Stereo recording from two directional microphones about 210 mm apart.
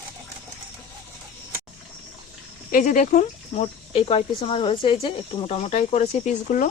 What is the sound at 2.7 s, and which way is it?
Speech, 40° left (ahead or behind).